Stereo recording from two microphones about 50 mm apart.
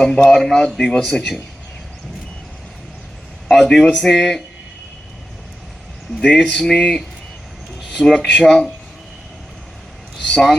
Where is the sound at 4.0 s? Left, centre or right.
Centre.